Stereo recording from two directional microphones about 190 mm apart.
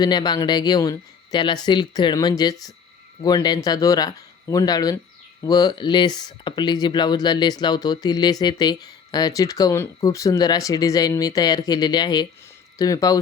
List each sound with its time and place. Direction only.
0.0 s speech: 20° left (ahead or behind)